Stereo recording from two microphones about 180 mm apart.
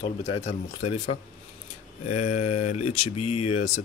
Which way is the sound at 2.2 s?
40° left (ahead or behind).